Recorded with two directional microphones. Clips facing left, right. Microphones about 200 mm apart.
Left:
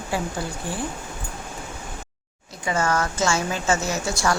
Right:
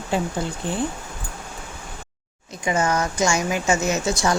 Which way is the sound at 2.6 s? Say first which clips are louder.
Right 2 dB; 20° right (ahead or behind).